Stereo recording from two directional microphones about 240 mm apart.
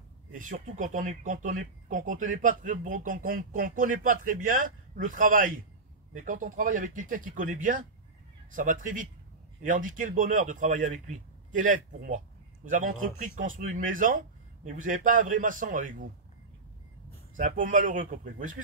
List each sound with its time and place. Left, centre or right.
0.3 s speech: right
17.4 s speech: right